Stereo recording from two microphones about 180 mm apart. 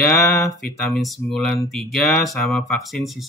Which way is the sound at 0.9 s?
Centre (ahead or behind).